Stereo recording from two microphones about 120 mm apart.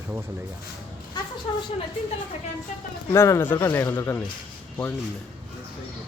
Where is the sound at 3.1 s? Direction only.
25° left (ahead or behind).